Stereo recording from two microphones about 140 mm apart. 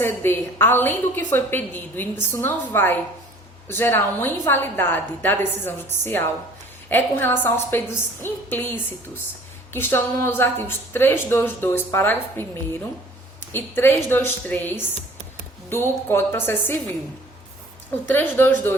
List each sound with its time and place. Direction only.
0.0 s a woman's voice: 15° left (ahead or behind)
18.1 s a woman's voice: 15° left (ahead or behind)